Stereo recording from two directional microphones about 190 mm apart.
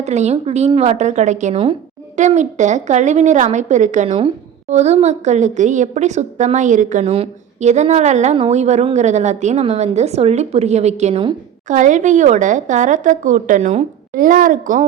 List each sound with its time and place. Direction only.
0.0 s a woman's voice: 35° right (ahead or behind)
11.7 s a woman's voice: 40° right (ahead or behind)